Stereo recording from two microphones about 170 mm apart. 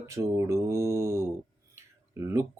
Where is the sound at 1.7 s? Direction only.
15° right (ahead or behind).